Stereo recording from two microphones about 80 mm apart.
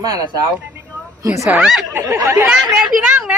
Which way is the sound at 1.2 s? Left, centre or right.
Right.